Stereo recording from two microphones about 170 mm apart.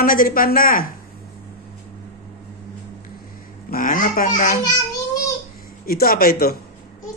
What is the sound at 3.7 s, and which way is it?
A child's voice, 55° left (ahead or behind).